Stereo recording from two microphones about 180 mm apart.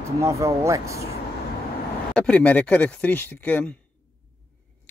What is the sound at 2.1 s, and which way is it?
Speech, 5° left (ahead or behind).